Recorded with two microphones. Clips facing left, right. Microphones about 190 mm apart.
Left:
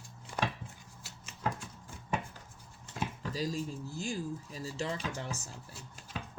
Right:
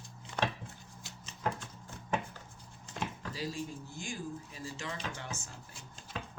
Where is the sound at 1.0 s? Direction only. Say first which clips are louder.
Even; 10° left (ahead or behind).